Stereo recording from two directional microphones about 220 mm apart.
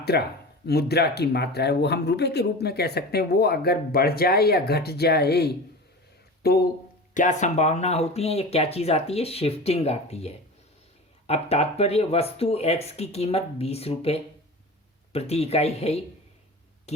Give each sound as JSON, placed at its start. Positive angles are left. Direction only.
{"t": 0.1, "sound": "speech", "side_deg": 50}
{"t": 7.1, "sound": "speech", "side_deg": 35}